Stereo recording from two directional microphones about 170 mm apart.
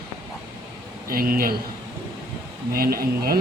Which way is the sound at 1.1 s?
60° right (ahead or behind).